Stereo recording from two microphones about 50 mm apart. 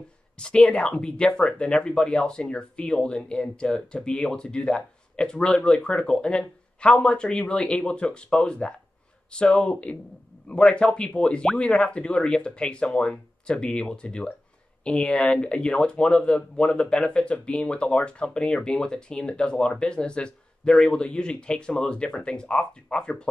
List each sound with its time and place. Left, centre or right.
0.4 s speech: centre